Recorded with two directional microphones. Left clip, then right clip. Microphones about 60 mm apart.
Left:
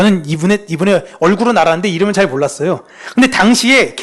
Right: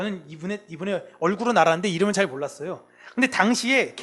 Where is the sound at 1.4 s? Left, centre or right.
Right.